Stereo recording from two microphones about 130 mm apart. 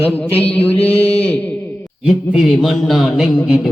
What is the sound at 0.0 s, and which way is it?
Mantra, 15° left (ahead or behind).